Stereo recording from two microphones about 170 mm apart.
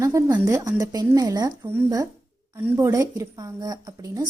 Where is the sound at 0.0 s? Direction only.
20° right (ahead or behind).